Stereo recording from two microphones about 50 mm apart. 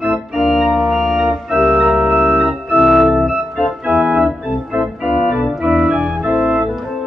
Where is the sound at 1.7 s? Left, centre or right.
Centre.